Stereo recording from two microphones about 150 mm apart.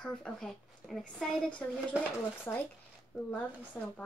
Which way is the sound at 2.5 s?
20° left (ahead or behind).